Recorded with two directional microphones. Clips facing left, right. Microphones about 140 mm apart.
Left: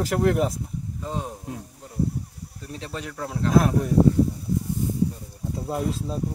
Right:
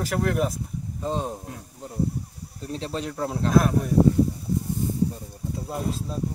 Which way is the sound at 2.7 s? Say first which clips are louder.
Right 4 dB; 25° right (ahead or behind).